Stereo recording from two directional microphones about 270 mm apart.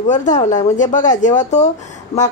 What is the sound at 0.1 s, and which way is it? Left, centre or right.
Speech, left.